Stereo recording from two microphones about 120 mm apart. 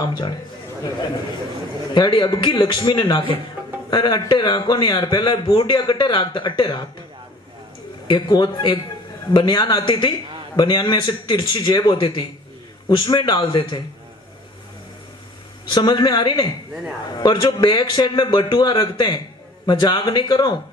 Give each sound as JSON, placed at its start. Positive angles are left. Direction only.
{"t": 0.0, "sound": "a man's voice", "side_deg": 35}
{"t": 2.0, "sound": "a man's voice", "side_deg": 40}
{"t": 8.1, "sound": "a man's voice", "side_deg": 40}
{"t": 15.7, "sound": "a man's voice", "side_deg": 40}